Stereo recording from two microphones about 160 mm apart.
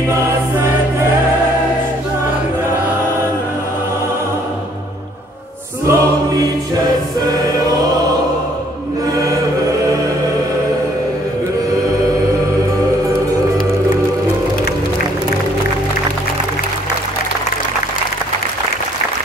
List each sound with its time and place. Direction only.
5.9 s choir: 20° right (ahead or behind)
9.1 s chant: 20° right (ahead or behind)